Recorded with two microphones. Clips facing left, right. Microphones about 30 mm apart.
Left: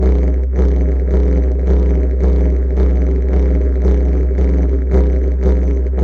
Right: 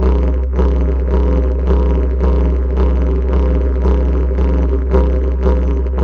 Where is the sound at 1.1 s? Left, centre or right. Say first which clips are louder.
Right 1 dB; right.